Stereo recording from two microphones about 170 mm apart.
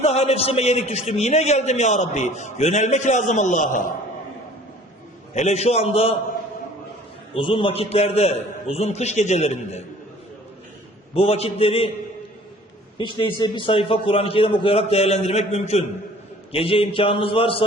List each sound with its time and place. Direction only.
0.0 s a man's voice: 40° left (ahead or behind)
5.3 s a man's voice: 40° left (ahead or behind)
7.3 s a man's voice: 30° left (ahead or behind)
11.1 s a man's voice: 35° left (ahead or behind)
13.0 s a man's voice: 25° left (ahead or behind)